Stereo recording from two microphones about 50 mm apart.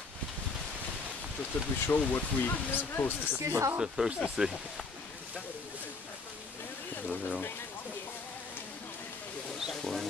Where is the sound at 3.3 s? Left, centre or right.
Right.